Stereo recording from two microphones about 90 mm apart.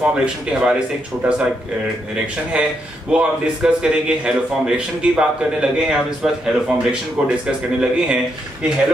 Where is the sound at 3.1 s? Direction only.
10° right (ahead or behind).